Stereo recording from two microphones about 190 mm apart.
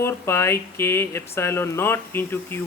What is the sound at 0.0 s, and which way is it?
Speech, 15° left (ahead or behind).